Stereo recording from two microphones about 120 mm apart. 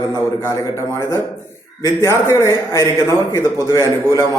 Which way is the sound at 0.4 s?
25° left (ahead or behind).